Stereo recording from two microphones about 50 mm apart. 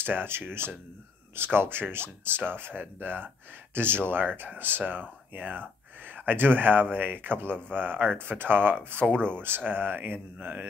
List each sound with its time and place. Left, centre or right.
0.0 s speech: right